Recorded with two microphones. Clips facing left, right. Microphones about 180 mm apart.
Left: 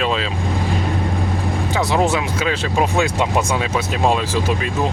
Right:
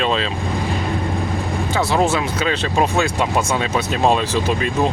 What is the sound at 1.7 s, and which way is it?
Speech, 15° left (ahead or behind).